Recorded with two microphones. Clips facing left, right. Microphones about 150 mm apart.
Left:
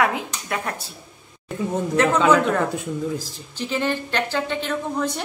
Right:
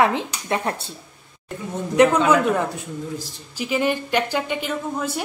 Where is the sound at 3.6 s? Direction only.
10° right (ahead or behind).